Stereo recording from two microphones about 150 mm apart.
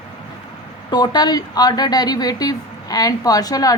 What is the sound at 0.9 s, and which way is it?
Speech, 25° left (ahead or behind).